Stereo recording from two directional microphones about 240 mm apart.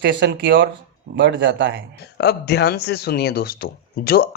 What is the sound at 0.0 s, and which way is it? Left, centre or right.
Speech, right.